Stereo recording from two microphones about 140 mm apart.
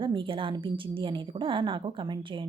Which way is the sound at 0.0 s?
35° right (ahead or behind).